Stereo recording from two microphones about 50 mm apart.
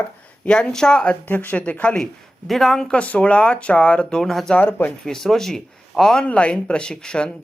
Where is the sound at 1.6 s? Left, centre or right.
Left.